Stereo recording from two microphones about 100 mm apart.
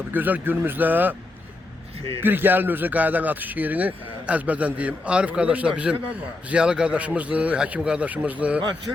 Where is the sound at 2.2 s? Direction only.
20° right (ahead or behind).